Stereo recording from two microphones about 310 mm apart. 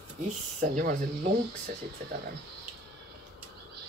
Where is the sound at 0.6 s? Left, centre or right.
Right.